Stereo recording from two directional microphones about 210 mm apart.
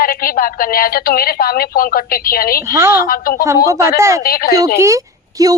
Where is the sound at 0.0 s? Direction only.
40° left (ahead or behind).